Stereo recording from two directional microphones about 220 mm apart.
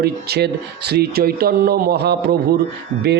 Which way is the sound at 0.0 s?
45° right (ahead or behind).